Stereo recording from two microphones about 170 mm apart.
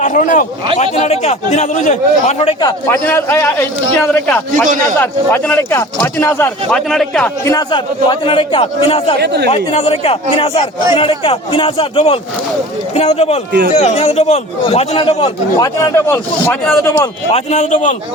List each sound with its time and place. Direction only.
0.0 s speech: 50° left (ahead or behind)
0.8 s a man's voice: 40° left (ahead or behind)
3.1 s speech: 15° left (ahead or behind)
7.4 s a man's voice: 25° left (ahead or behind)
9.2 s speech: 75° right (ahead or behind)
9.5 s a man's voice: 35° left (ahead or behind); by 17.1 s 15° left (ahead or behind)
17.3 s speech: 45° left (ahead or behind)